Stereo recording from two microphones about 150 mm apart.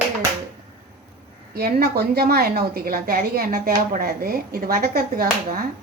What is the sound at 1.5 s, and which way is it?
A woman's voice, 90° right.